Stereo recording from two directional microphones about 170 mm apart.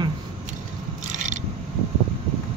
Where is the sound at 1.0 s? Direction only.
50° right (ahead or behind).